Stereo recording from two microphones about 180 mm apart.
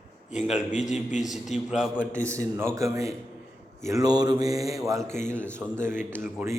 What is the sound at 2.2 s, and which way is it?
A man's voice, 15° right (ahead or behind).